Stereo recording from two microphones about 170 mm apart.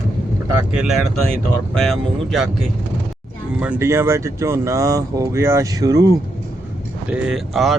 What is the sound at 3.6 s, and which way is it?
Speech, 10° right (ahead or behind).